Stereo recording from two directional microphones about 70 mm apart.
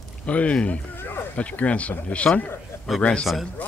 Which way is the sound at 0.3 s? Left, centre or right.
Centre.